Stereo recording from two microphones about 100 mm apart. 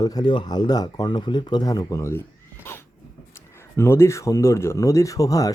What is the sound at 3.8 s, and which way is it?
Speech, 25° left (ahead or behind).